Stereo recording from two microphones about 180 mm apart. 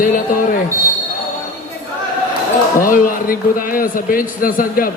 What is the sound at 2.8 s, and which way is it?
A man's voice, 50° left (ahead or behind).